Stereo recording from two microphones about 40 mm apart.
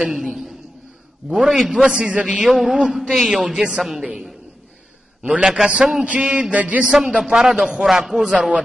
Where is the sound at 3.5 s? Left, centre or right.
Right.